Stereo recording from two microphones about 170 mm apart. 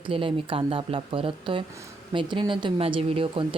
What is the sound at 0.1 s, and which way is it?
A woman's voice, 35° right (ahead or behind).